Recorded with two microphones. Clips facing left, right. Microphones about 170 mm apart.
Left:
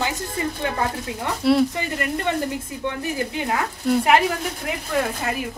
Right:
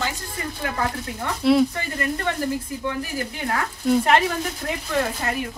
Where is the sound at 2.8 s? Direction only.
25° left (ahead or behind).